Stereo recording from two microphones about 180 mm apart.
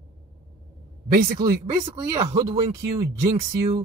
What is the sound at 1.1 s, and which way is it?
Speech, 55° right (ahead or behind).